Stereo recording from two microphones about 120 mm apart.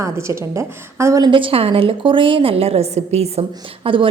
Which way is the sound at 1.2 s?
45° right (ahead or behind).